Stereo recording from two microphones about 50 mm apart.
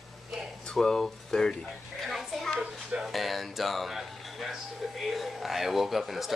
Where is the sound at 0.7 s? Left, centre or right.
Centre.